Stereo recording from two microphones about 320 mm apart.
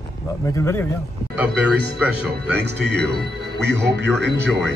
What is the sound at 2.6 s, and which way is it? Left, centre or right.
Speech, right.